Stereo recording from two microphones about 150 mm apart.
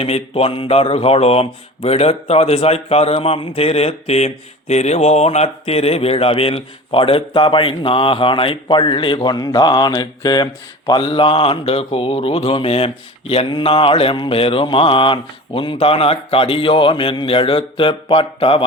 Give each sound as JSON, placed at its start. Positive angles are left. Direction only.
{"t": 0.0, "sound": "speech", "side_deg": 40}